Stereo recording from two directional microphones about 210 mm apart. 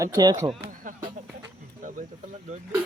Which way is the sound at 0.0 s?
20° right (ahead or behind).